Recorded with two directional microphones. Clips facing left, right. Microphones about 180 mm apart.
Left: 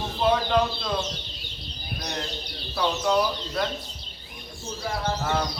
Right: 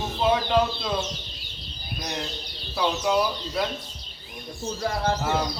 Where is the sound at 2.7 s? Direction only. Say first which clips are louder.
Even; 5° right (ahead or behind).